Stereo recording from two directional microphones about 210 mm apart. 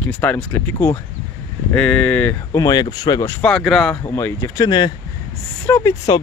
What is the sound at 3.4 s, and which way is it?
Speech, centre (ahead or behind).